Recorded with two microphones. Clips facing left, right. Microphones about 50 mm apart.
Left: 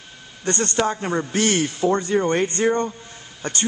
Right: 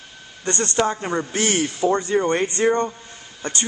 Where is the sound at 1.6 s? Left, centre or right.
Centre.